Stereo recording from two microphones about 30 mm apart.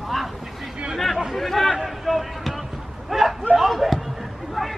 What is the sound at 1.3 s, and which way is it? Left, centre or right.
Chatter, centre.